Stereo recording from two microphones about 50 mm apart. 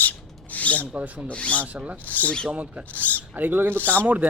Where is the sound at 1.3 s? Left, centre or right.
Left.